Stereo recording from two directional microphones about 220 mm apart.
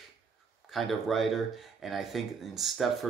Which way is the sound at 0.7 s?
Centre (ahead or behind).